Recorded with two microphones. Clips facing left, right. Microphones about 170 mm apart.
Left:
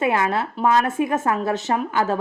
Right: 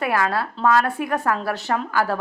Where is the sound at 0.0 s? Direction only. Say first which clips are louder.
Left 1 dB; 20° left (ahead or behind).